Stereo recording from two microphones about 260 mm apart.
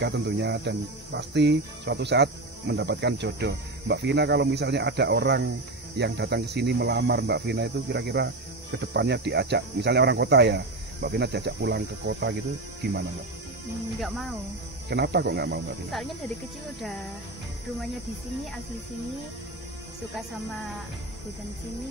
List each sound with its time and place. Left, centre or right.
0.0 s speech: right
14.0 s cricket: centre
14.9 s speech: right